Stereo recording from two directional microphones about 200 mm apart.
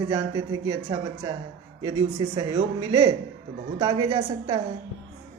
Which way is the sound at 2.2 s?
25° right (ahead or behind).